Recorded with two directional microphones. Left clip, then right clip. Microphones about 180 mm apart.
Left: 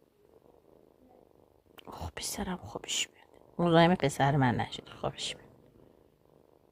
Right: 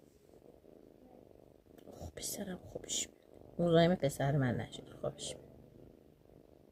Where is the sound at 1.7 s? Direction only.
40° left (ahead or behind).